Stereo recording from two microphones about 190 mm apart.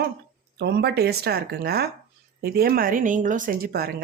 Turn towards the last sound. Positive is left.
turn(degrees=-55)  # may be behind; listen again after turning